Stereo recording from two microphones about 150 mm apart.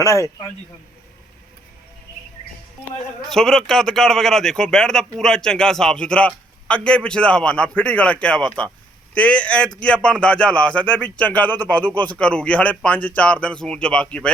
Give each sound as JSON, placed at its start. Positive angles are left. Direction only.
{"t": 0.0, "sound": "a man's voice", "side_deg": 20}
{"t": 3.2, "sound": "a man's voice", "side_deg": 5}